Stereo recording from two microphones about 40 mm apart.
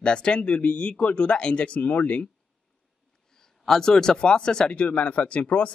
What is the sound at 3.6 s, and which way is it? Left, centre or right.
Speech, centre.